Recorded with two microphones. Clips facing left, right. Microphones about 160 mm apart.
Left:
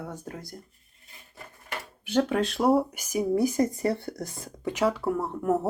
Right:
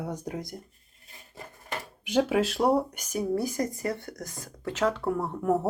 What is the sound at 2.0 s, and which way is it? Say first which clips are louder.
Speech: even; 10° right (ahead or behind).